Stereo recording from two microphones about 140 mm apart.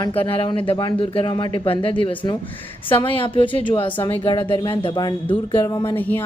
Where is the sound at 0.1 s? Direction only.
40° left (ahead or behind).